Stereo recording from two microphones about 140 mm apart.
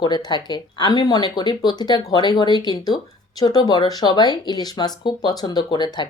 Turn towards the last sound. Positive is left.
turn(degrees=30)  # may be behind; listen again after turning